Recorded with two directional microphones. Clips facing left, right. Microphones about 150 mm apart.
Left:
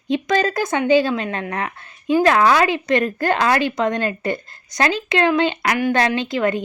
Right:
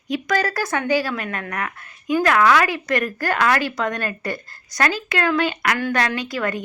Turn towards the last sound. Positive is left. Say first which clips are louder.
# left 5 dB
turn(degrees=25)  # may be behind; listen again after turning